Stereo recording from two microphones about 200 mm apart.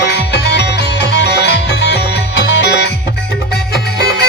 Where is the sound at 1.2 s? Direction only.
55° left (ahead or behind).